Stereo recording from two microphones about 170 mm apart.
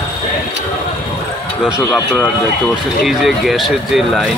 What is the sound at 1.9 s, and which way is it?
Speech, 5° left (ahead or behind).